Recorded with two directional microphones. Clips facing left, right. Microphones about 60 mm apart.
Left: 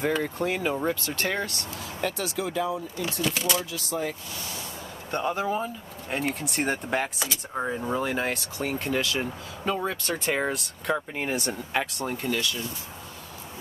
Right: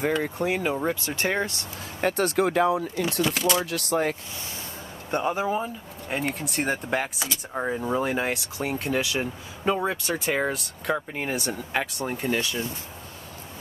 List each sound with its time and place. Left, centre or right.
0.0 s speech: centre; by 1.6 s right
2.0 s speech: right
5.1 s speech: centre
12.0 s speech: centre
12.3 s speech: right